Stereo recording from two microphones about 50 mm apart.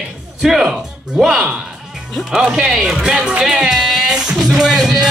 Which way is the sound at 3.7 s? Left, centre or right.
Centre.